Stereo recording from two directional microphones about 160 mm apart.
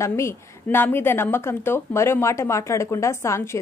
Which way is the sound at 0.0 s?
15° left (ahead or behind).